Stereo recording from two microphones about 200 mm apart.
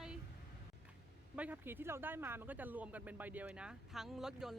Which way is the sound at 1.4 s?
10° right (ahead or behind).